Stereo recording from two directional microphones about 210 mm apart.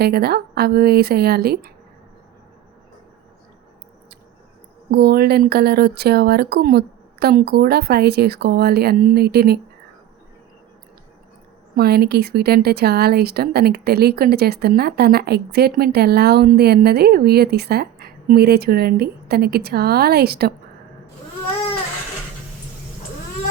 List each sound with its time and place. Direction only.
0.0 s speech: 50° right (ahead or behind)
4.9 s speech: 50° right (ahead or behind)
11.7 s speech: 50° right (ahead or behind)